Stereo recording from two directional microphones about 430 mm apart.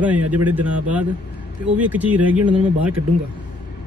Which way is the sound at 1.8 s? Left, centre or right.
Centre.